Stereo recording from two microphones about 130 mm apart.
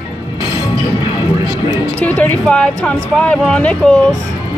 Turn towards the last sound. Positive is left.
turn(degrees=10)  # may be behind; listen again after turning